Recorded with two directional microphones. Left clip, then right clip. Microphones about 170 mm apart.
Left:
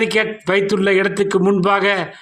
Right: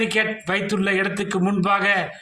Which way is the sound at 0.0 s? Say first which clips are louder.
Left 4 dB; 40° left (ahead or behind).